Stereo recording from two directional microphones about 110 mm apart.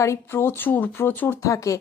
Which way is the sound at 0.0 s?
25° left (ahead or behind).